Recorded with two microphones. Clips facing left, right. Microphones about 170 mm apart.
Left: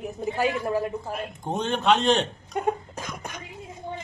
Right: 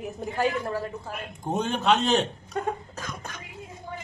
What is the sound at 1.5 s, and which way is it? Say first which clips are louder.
Speech: left 1 dB; 5° right (ahead or behind).